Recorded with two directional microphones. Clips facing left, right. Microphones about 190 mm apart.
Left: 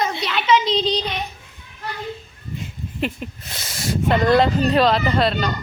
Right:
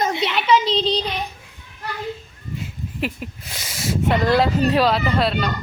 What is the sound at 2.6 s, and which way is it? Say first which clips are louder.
Speech: left 1 dB; 5° right (ahead or behind).